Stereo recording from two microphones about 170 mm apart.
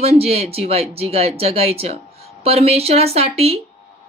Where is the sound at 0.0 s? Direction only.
35° right (ahead or behind).